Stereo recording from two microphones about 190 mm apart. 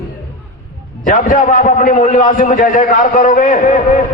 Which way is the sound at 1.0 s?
45° left (ahead or behind).